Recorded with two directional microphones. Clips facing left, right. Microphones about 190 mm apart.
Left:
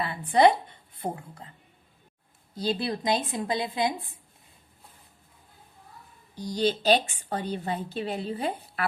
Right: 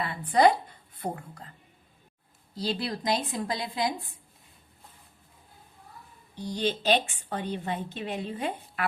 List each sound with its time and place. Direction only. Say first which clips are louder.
0.0 s a woman's voice: left 1 dB; 30° left (ahead or behind)
2.6 s a woman's voice: left 3 dB; 25° left (ahead or behind)
6.3 s a woman's voice: left 3 dB; 40° left (ahead or behind)